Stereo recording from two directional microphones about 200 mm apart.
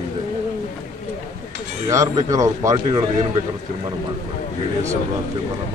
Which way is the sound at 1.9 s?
15° right (ahead or behind).